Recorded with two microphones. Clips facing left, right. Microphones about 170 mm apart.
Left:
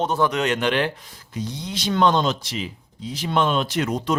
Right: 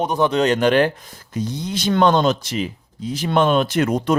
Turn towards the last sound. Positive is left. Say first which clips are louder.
# right 5 dB
turn(degrees=-55)  # may be behind; listen again after turning